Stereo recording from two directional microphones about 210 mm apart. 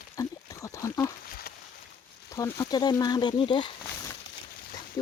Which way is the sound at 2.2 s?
15° left (ahead or behind).